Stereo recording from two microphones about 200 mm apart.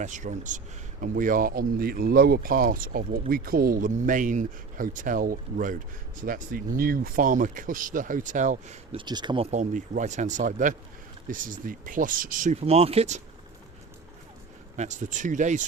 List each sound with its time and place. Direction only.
0.0 s speech: 40° right (ahead or behind); by 9.5 s 25° right (ahead or behind)
9.5 s speech: 40° right (ahead or behind)
14.8 s speech: 35° right (ahead or behind)